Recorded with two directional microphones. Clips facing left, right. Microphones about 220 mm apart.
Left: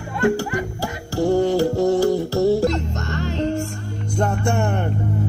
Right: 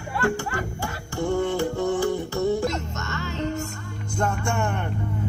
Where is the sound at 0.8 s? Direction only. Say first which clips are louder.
Left 8 dB; 35° left (ahead or behind).